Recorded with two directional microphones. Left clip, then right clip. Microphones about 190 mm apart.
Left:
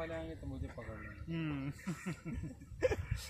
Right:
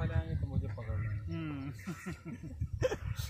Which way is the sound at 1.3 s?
55° left (ahead or behind).